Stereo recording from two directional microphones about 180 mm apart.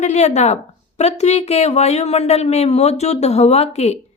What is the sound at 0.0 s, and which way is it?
A woman's voice, 40° left (ahead or behind).